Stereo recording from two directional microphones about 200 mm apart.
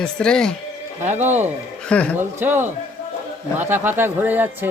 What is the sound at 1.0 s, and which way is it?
Speech, 35° right (ahead or behind).